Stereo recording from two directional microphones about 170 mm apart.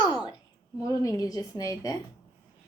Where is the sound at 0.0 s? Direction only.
25° left (ahead or behind).